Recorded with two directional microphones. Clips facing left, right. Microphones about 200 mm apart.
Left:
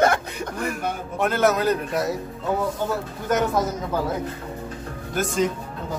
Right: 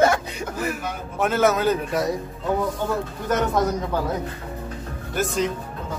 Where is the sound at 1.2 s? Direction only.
Centre (ahead or behind).